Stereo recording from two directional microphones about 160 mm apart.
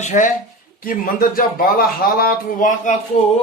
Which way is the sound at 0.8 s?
60° left (ahead or behind).